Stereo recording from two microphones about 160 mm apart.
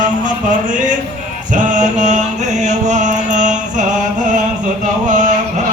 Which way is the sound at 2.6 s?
50° right (ahead or behind).